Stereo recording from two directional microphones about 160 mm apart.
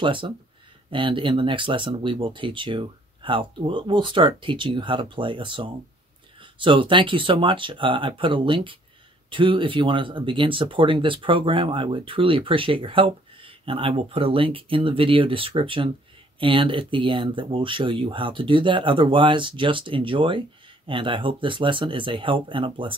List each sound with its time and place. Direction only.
0.0 s speech: 30° right (ahead or behind)